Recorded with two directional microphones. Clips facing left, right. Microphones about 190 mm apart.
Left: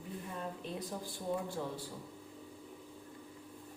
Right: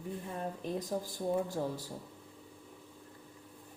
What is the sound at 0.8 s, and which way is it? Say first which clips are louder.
Speech: right 6 dB; 40° right (ahead or behind).